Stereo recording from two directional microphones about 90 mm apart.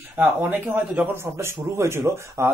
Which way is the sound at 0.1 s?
20° right (ahead or behind).